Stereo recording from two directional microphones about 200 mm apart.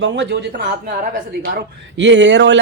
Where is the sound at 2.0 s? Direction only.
65° right (ahead or behind).